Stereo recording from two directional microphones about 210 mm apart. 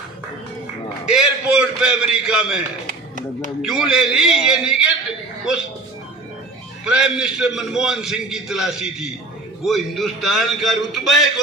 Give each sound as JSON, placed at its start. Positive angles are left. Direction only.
{"t": 1.1, "sound": "a man's voice", "side_deg": -5}
{"t": 2.8, "sound": "music", "side_deg": -35}
{"t": 3.6, "sound": "a man's voice", "side_deg": 0}
{"t": 6.8, "sound": "a man's voice", "side_deg": -5}